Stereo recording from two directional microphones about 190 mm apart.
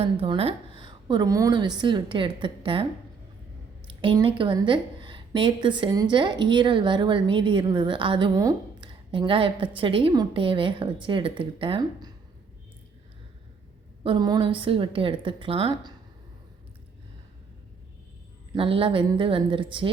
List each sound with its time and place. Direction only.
0.0 s a woman's voice: 30° right (ahead or behind)
3.8 s a woman's voice: 25° right (ahead or behind)
14.0 s a woman's voice: 25° right (ahead or behind)
18.5 s a woman's voice: 30° right (ahead or behind)